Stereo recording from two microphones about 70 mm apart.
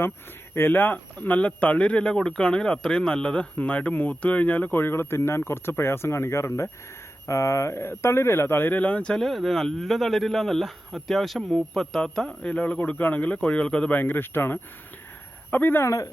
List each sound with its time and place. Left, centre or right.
0.5 s speech: left
9.2 s speech: centre
14.0 s speech: left
15.8 s speech: left